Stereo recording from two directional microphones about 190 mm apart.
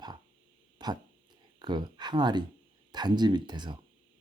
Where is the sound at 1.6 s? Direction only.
20° right (ahead or behind).